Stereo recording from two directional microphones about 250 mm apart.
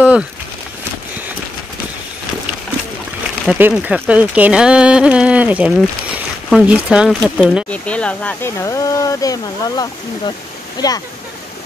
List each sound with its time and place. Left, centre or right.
3.4 s speech: centre